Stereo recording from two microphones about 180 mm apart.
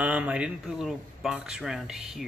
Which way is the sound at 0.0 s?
5° right (ahead or behind).